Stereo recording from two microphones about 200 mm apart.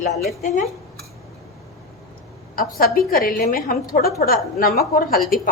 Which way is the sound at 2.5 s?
45° left (ahead or behind).